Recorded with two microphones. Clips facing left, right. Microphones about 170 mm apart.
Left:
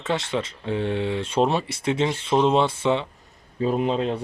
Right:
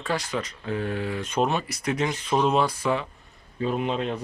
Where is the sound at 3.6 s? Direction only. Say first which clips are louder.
Left 4 dB; 35° left (ahead or behind).